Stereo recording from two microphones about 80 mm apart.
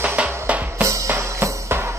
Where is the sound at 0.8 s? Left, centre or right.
Right.